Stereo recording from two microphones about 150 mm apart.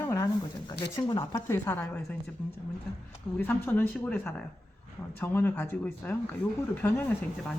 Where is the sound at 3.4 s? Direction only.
15° left (ahead or behind).